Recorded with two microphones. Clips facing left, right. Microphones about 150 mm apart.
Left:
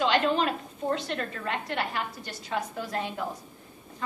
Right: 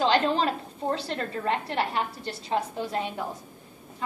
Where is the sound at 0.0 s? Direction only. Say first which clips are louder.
Right 1 dB; 35° right (ahead or behind).